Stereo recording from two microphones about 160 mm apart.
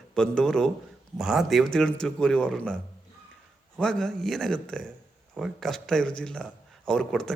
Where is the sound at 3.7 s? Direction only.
5° left (ahead or behind).